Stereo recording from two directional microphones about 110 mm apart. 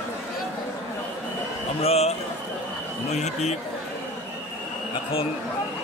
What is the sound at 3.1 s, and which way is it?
Speech, 90° left.